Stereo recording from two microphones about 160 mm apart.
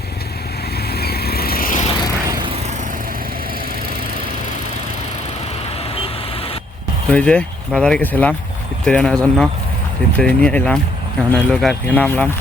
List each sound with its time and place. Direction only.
0.9 s vehicle: 80° left; by 1.8 s 65° left (ahead or behind)
7.1 s speech: 5° left (ahead or behind)